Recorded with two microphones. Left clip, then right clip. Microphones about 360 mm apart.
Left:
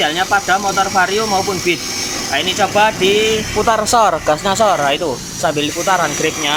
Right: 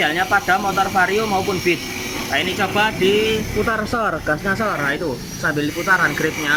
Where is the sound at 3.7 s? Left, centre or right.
Left.